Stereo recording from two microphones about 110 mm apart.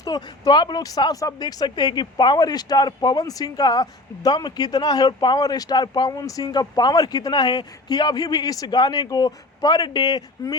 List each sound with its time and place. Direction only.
0.0 s speech: 40° left (ahead or behind)